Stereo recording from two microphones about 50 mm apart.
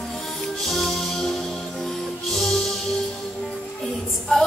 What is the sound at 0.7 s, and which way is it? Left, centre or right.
Music, centre.